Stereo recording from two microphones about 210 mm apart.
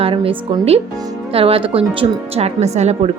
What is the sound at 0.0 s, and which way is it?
Speech, 25° right (ahead or behind).